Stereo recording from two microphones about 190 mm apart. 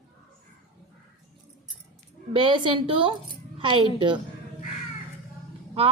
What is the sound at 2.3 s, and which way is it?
A woman's voice, 25° right (ahead or behind).